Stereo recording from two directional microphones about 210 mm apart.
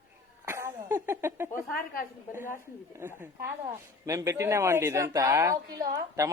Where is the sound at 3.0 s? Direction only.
10° right (ahead or behind).